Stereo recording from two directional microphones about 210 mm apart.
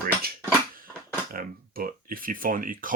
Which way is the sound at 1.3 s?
45° right (ahead or behind).